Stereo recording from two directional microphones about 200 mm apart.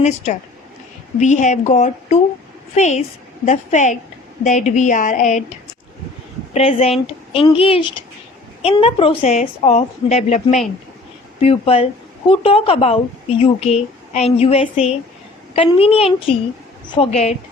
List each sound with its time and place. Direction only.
0.0 s a woman's voice: 35° left (ahead or behind)
6.5 s a woman's voice: 30° left (ahead or behind)